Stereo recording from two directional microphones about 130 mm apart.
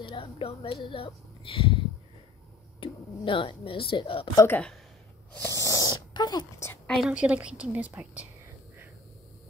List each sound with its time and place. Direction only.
0.0 s speech: 40° left (ahead or behind)
2.8 s speech: 40° left (ahead or behind)
4.5 s speech: 10° left (ahead or behind)
5.3 s sneeze: 20° left (ahead or behind)
7.1 s a woman's voice: 10° right (ahead or behind)